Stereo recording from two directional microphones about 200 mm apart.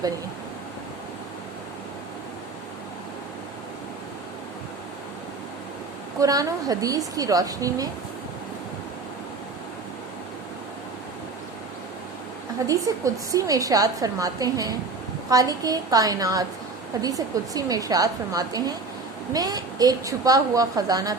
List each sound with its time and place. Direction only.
6.1 s a woman's voice: 15° right (ahead or behind)
12.6 s a woman's voice: 15° right (ahead or behind)